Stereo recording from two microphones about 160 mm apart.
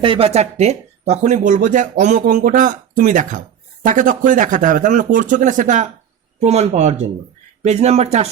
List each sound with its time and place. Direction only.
0.0 s speech: 35° right (ahead or behind)